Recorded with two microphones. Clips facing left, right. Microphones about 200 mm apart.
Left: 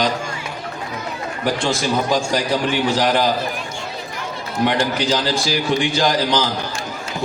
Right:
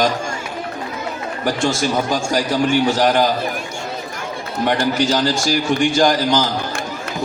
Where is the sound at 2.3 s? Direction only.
45° right (ahead or behind).